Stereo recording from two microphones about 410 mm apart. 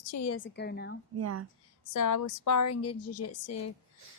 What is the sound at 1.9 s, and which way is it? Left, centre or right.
Speech, left.